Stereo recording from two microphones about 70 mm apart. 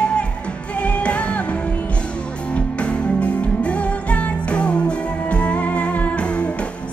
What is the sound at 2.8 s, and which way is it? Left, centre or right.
Music, centre.